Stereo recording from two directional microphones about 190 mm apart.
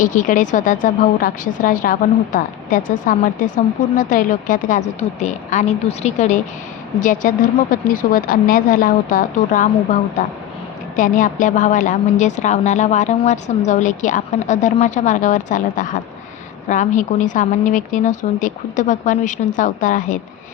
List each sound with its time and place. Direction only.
0.0 s a woman's voice: 45° left (ahead or behind)